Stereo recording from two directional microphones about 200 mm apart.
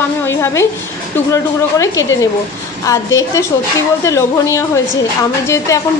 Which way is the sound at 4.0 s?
15° left (ahead or behind).